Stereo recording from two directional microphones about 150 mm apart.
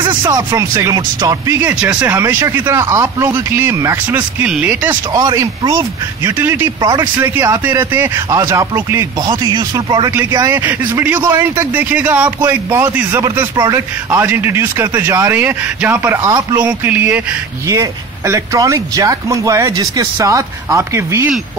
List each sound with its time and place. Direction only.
0.0 s speech: 30° right (ahead or behind)
1.6 s speech: 10° right (ahead or behind)
5.1 s speech: 20° right (ahead or behind)
6.8 s speech: 25° right (ahead or behind)